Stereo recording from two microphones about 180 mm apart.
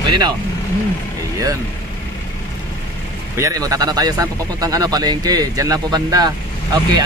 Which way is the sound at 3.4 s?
20° right (ahead or behind).